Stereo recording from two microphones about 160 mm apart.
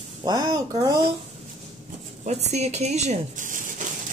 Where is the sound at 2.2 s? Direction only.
45° right (ahead or behind).